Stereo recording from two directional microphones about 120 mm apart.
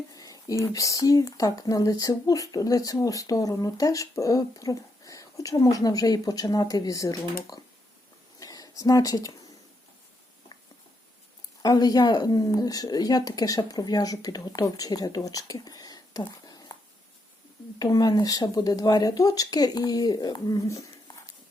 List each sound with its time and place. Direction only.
0.1 s speech: 30° left (ahead or behind)
8.4 s a sound: 30° left (ahead or behind)
8.8 s speech: 30° left (ahead or behind)
11.6 s speech: 35° left (ahead or behind)
17.7 s speech: 30° left (ahead or behind)